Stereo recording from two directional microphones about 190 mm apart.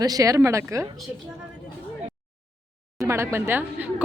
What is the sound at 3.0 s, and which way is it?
Speech, 15° right (ahead or behind).